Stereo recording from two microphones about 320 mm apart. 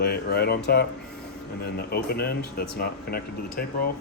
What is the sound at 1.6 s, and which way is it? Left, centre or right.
Speech, left.